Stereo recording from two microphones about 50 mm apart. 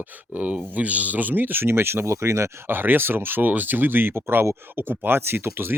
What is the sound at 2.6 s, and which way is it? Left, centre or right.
Speech, right.